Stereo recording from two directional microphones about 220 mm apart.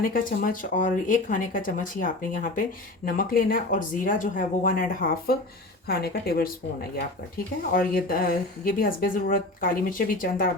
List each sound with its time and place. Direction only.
0.0 s speech: 40° left (ahead or behind)
7.7 s speech: 40° left (ahead or behind)